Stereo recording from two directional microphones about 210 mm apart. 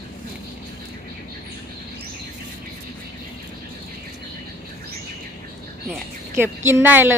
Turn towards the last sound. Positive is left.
turn(degrees=-10)  # may be behind; listen again after turning